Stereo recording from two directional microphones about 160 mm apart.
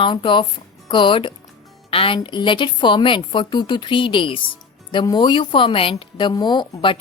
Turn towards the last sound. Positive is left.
turn(degrees=30)  # may be behind; listen again after turning